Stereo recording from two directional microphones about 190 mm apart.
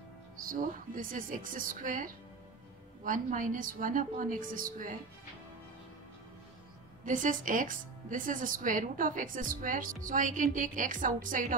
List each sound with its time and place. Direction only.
0.4 s speech: 45° right (ahead or behind)
7.1 s speech: 45° right (ahead or behind)